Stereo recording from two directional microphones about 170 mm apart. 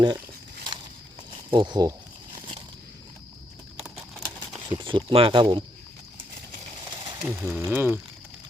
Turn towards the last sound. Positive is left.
turn(degrees=-10)  # may be behind; listen again after turning